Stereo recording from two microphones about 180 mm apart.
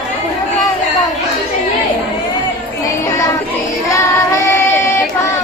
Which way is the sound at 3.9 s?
15° left (ahead or behind).